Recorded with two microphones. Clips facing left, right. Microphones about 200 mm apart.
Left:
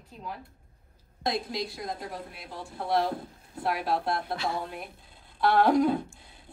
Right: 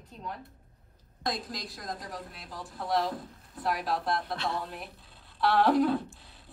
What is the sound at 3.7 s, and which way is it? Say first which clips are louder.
A woman's voice: left 2 dB; centre (ahead or behind).